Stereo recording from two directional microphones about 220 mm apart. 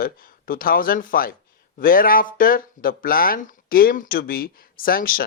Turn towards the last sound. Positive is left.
turn(degrees=40)  # may be behind; listen again after turning